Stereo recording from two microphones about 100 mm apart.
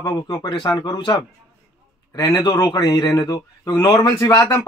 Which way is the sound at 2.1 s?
40° left (ahead or behind).